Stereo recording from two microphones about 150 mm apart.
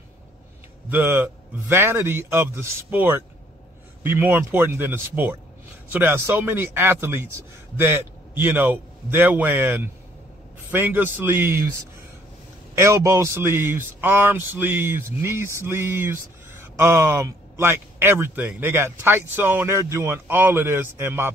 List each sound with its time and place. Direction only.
0.8 s speech: 15° right (ahead or behind)
12.7 s speech: 20° right (ahead or behind)